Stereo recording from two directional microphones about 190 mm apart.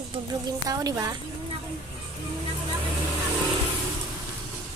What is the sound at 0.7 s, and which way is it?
Speech, 20° right (ahead or behind).